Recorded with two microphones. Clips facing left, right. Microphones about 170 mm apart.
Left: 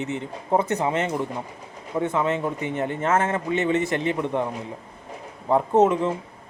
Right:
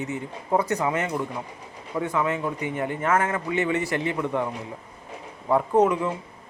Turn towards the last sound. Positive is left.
turn(degrees=25)  # may be behind; listen again after turning